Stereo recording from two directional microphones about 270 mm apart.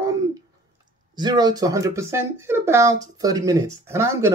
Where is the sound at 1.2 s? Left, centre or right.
Centre.